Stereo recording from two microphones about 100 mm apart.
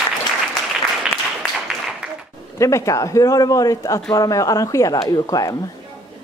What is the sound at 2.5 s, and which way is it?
A man's voice, 30° left (ahead or behind).